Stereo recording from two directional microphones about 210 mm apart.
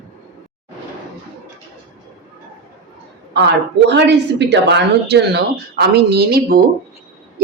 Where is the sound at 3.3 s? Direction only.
55° right (ahead or behind).